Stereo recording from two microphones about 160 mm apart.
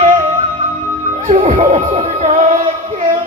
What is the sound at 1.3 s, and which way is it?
Music, 50° right (ahead or behind).